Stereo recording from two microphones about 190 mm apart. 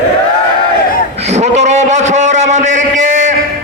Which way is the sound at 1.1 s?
35° right (ahead or behind).